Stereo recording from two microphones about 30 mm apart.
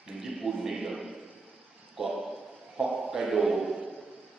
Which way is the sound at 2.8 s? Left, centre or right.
Right.